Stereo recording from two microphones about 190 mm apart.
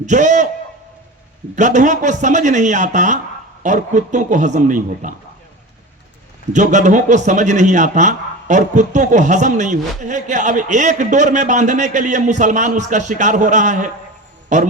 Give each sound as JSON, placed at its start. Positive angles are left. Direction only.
{"t": 0.0, "sound": "a man's voice", "side_deg": -40}
{"t": 1.5, "sound": "a man's voice", "side_deg": -40}
{"t": 6.5, "sound": "a man's voice", "side_deg": -40}